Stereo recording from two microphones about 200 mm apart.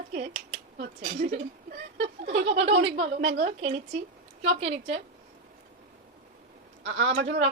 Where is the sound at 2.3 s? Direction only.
30° right (ahead or behind).